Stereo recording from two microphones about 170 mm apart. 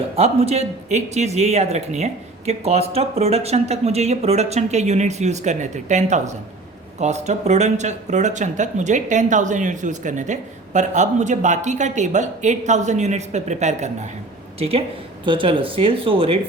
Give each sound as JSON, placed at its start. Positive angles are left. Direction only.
{"t": 0.2, "sound": "speech", "side_deg": -35}